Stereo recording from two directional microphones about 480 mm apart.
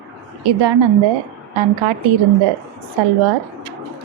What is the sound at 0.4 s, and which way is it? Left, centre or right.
Speech, right.